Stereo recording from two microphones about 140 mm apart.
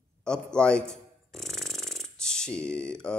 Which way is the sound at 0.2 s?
5° left (ahead or behind).